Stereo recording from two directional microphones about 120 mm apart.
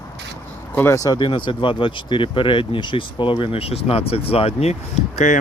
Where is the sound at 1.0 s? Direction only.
40° left (ahead or behind); by 4.7 s 60° left (ahead or behind).